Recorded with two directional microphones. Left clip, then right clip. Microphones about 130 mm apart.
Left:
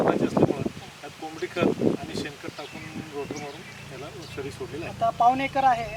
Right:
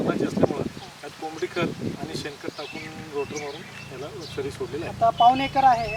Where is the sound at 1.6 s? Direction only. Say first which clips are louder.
Left 8 dB; centre (ahead or behind).